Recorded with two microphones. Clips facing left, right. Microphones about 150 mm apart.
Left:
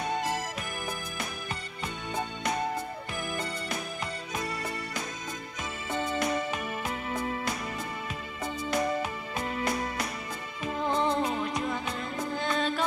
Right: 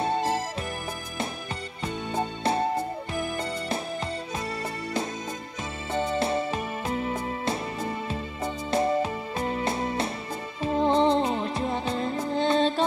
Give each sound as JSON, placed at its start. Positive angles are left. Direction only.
{"t": 0.0, "sound": "music", "side_deg": -30}
{"t": 2.1, "sound": "music", "side_deg": -30}
{"t": 5.9, "sound": "music", "side_deg": -30}
{"t": 8.6, "sound": "music", "side_deg": -30}